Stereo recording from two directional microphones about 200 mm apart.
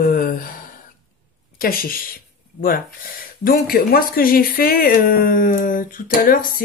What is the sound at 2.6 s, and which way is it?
Speech, 45° left (ahead or behind).